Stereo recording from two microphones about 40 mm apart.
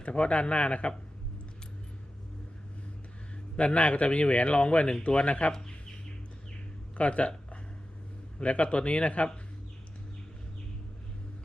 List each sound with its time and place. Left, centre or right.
0.0 s speech: left
3.6 s speech: left
5.5 s speech: centre
6.9 s speech: left